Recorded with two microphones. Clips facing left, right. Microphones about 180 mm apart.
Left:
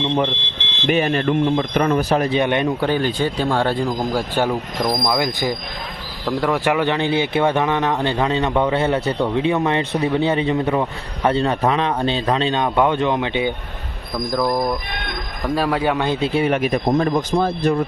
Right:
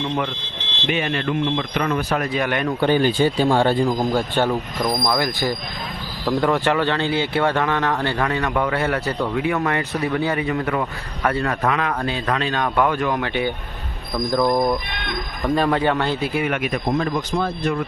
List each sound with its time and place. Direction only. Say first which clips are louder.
0.0 s smoke detector: left 4 dB; 20° left (ahead or behind)
0.9 s speech: left 5 dB; 40° left (ahead or behind); by 2.7 s 25° left (ahead or behind)
2.8 s a man's voice: right 2 dB; centre (ahead or behind)
5.1 s a man's voice: left 1 dB; 15° left (ahead or behind)
6.2 s speech: right 1 dB; centre (ahead or behind)
6.7 s a man's voice: left 1 dB; 15° left (ahead or behind)
14.3 s a man's voice: right 1 dB; centre (ahead or behind); by 16.3 s 15° left (ahead or behind)
16.3 s speech: left 4 dB; 30° left (ahead or behind)